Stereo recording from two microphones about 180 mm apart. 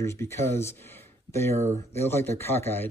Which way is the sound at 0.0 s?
15° left (ahead or behind).